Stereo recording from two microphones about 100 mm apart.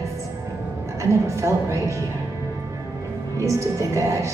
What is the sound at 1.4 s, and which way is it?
Speech, 30° right (ahead or behind).